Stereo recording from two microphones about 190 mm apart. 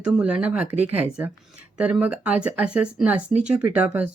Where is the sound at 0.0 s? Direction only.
5° right (ahead or behind).